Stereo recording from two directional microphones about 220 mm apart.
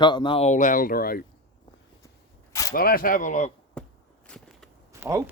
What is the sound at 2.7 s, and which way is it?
Speech, 40° left (ahead or behind).